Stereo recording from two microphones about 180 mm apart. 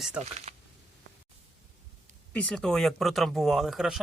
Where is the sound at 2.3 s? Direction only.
5° left (ahead or behind).